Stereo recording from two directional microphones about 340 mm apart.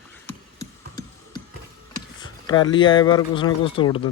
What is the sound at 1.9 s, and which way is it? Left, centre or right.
Speech, centre.